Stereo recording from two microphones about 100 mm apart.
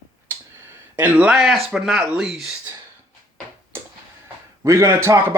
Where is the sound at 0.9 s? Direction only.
15° right (ahead or behind).